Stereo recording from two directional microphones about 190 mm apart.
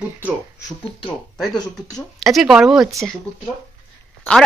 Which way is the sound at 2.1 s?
Centre (ahead or behind).